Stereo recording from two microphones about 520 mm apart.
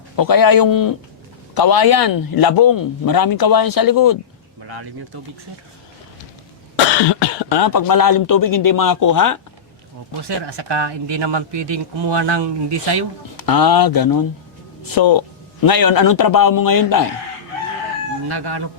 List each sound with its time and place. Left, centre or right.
0.2 s speech: left
7.2 s speech: left
10.2 s speech: right
13.3 s speech: left
18.3 s speech: right